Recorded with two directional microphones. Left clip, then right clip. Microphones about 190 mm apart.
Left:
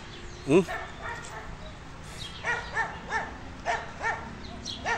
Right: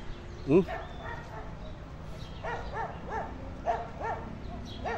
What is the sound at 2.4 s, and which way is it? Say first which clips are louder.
Dog: left 6 dB; 35° right (ahead or behind).